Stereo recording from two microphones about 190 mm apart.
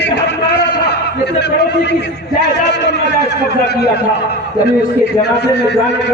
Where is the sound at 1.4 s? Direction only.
65° left (ahead or behind).